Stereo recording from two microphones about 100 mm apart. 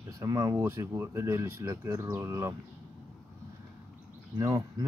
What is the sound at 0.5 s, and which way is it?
Speech, 25° right (ahead or behind).